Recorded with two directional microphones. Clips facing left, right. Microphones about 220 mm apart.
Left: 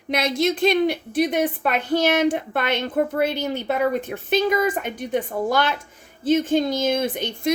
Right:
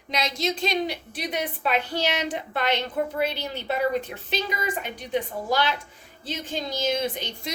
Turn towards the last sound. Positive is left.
turn(degrees=50)  # may be behind; listen again after turning